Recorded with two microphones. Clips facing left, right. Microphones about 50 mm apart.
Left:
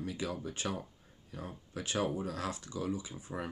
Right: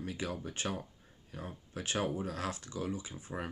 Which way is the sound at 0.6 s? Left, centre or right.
Centre.